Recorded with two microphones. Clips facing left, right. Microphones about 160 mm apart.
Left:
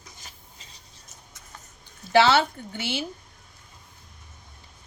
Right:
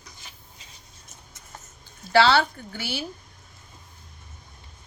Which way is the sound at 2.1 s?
20° left (ahead or behind).